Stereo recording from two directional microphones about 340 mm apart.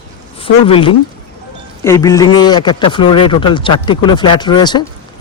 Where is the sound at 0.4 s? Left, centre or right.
Centre.